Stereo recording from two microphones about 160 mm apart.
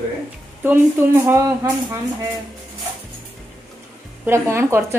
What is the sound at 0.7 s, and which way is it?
A woman's voice, 15° right (ahead or behind).